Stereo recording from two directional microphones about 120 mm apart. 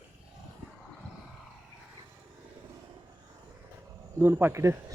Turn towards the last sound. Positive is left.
turn(degrees=-25)  # may be behind; listen again after turning